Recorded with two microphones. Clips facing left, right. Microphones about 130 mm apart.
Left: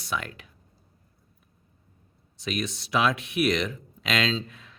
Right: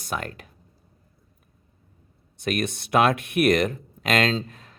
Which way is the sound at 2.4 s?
55° right (ahead or behind).